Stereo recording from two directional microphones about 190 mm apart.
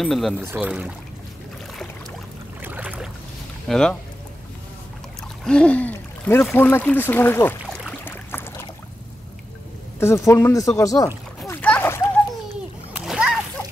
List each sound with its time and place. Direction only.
0.0 s speech: centre (ahead or behind)
0.4 s speech: 10° right (ahead or behind)
2.6 s boat: 10° right (ahead or behind)
3.6 s speech: 5° left (ahead or behind)
5.4 s speech: 5° left (ahead or behind)
8.0 s boat: 10° left (ahead or behind)
9.9 s speech: 15° left (ahead or behind)
11.4 s splash: 10° left (ahead or behind)
12.9 s splash: 5° right (ahead or behind)